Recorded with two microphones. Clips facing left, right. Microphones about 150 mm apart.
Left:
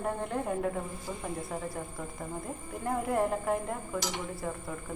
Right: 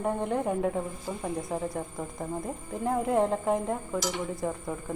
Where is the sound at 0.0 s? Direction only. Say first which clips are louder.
Right 4 dB; 15° right (ahead or behind).